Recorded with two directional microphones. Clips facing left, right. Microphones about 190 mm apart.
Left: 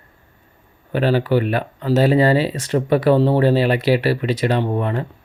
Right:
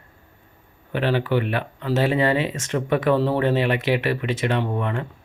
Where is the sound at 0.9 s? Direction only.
40° left (ahead or behind).